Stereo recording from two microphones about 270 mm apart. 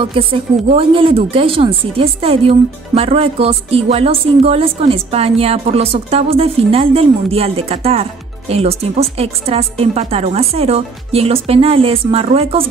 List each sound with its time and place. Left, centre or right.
0.0 s a woman's voice: centre